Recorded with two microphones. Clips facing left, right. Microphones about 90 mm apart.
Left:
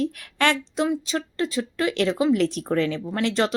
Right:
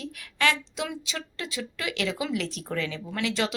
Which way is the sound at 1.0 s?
40° left (ahead or behind).